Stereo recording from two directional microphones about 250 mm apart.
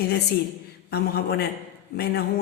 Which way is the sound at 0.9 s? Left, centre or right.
Left.